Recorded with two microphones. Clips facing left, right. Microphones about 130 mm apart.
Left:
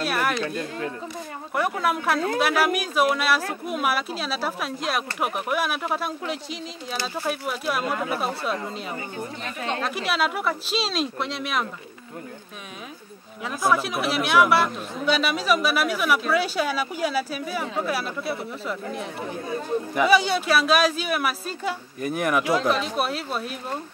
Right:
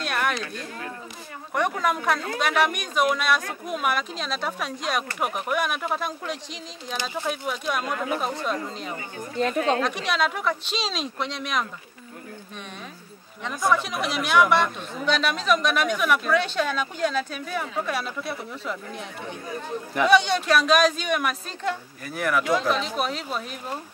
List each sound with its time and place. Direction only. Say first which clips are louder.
0.0 s a sound: left 2 dB; 5° left (ahead or behind)
1.5 s speech: even; 5° left (ahead or behind)
9.4 s speech: right 10 dB; 40° right (ahead or behind)
9.8 s speech: even; 5° left (ahead or behind)
13.4 s speech: left 1 dB; 5° left (ahead or behind)
22.0 s speech: left 2 dB; 20° left (ahead or behind)
22.4 s speech: left 1 dB; centre (ahead or behind)